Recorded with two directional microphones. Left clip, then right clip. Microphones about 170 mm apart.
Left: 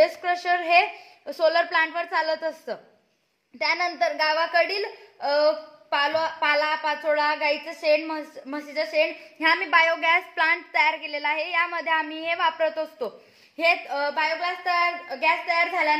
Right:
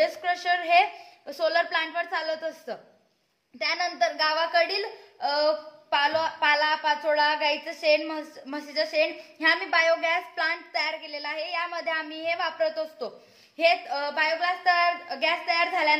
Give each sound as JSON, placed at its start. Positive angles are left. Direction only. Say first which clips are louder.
{"t": 0.0, "sound": "a woman's voice", "louder": "left 4 dB", "side_deg": 50}
{"t": 13.7, "sound": "a woman's voice", "louder": "left 1 dB", "side_deg": 60}